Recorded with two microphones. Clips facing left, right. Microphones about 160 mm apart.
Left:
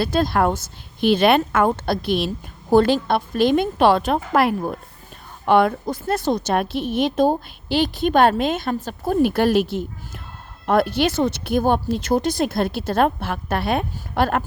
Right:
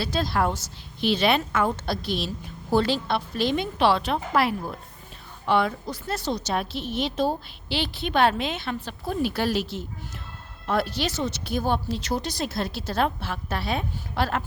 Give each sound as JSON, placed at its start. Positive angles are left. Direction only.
{"t": 0.0, "sound": "a woman's voice", "side_deg": 50}